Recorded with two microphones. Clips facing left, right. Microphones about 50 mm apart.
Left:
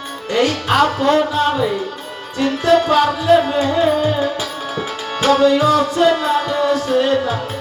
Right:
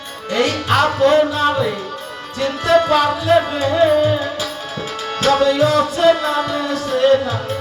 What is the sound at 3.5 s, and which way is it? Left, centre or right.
Tabla, centre.